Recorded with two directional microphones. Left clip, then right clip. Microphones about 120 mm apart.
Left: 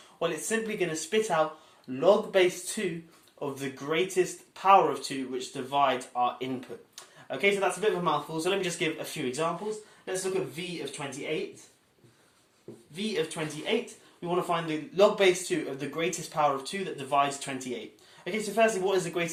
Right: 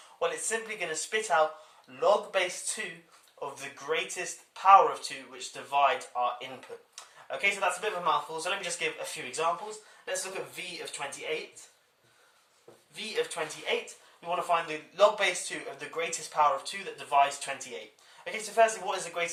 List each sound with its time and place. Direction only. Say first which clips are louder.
0.2 s speech: left 1 dB; 20° left (ahead or behind); by 11.4 s centre (ahead or behind)
12.9 s speech: left 1 dB; 5° left (ahead or behind)
14.2 s speech: even; 15° left (ahead or behind)